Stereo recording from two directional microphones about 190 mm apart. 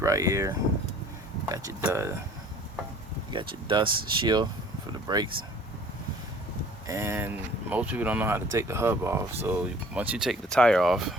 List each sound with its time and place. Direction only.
0.0 s speech: 15° right (ahead or behind)
3.3 s speech: 25° right (ahead or behind)
6.8 s speech: 15° right (ahead or behind)